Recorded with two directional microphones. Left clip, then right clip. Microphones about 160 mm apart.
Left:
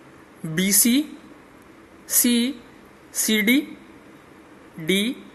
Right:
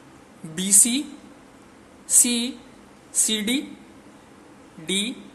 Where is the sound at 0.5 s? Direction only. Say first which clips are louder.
Left 1 dB; 25° left (ahead or behind).